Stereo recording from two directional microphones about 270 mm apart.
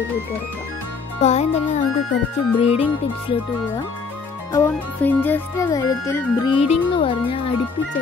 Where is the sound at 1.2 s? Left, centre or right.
Left.